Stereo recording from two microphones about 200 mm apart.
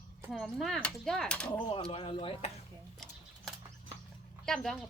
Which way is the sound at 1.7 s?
25° left (ahead or behind).